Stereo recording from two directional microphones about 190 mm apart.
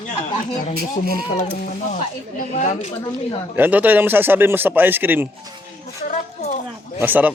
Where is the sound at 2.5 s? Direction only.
35° left (ahead or behind).